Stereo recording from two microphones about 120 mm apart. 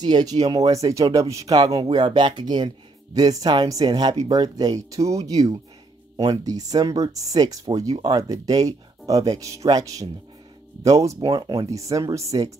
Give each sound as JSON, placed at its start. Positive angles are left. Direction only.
{"t": 0.0, "sound": "speech", "side_deg": -35}